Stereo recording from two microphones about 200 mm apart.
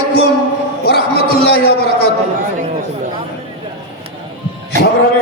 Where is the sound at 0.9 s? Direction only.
50° left (ahead or behind).